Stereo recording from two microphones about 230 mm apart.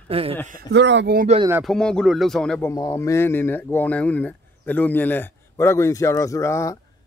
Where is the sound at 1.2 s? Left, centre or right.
Right.